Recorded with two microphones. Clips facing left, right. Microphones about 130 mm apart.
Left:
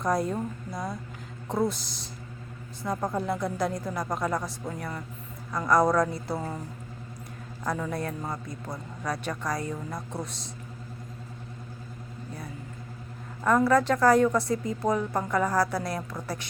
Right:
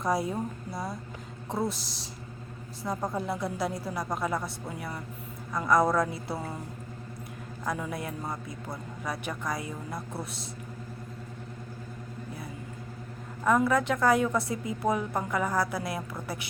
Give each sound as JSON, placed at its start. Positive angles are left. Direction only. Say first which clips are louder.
{"t": 0.0, "sound": "a man's voice", "louder": "left 2 dB", "side_deg": -5}
{"t": 7.6, "sound": "a man's voice", "louder": "left 3 dB", "side_deg": -5}
{"t": 13.4, "sound": "a man's voice", "louder": "left 2 dB", "side_deg": 0}